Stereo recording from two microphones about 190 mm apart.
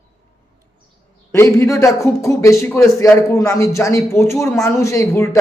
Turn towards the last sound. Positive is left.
turn(degrees=15)  # may be behind; listen again after turning